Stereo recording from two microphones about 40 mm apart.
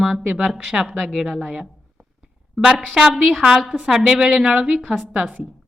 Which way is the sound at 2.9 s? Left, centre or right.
Centre.